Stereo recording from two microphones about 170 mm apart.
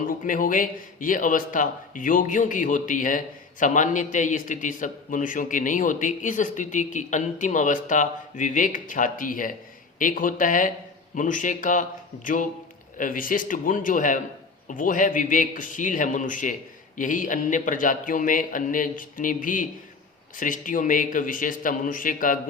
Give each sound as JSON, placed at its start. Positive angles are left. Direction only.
{"t": 0.1, "sound": "a man's voice", "side_deg": 55}